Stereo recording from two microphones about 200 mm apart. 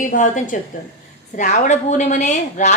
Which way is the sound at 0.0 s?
40° left (ahead or behind).